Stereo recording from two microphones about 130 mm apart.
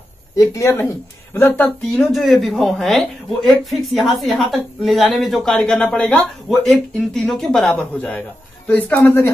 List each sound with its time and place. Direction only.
0.4 s speech: 20° left (ahead or behind)
2.0 s a woman's voice: centre (ahead or behind)